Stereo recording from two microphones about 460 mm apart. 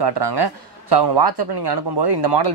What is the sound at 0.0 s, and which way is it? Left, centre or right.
Speech, right.